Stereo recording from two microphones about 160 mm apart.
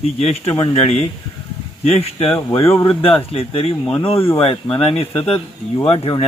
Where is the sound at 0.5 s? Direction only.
35° left (ahead or behind).